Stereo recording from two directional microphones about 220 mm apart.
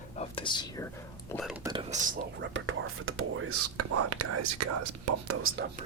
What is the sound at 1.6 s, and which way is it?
Whispering, 20° right (ahead or behind).